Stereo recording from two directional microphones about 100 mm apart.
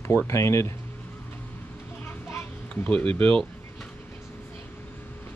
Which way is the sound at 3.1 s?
15° left (ahead or behind).